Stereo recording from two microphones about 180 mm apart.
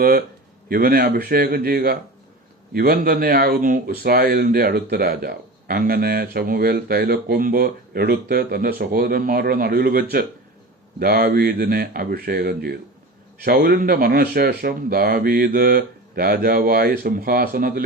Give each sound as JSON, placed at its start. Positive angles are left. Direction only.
{"t": 0.0, "sound": "speech", "side_deg": -55}